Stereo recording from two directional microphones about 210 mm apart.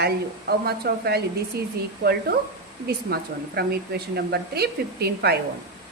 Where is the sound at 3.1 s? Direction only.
45° right (ahead or behind).